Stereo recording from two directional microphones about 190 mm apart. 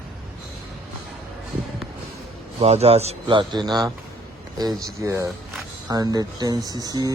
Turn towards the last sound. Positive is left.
turn(degrees=-20)  # may be behind; listen again after turning